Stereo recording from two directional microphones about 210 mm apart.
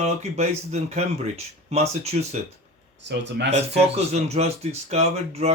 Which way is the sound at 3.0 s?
55° right (ahead or behind).